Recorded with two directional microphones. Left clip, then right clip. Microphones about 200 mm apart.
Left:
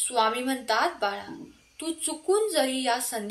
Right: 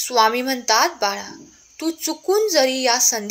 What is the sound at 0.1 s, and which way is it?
A woman's voice, 40° right (ahead or behind).